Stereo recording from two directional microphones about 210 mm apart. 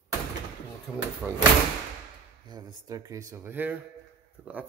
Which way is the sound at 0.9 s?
Centre (ahead or behind).